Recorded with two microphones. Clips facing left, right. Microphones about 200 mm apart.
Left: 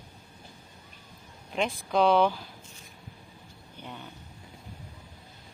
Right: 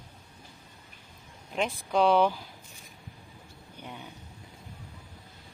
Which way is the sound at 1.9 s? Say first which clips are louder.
Even; 10° right (ahead or behind).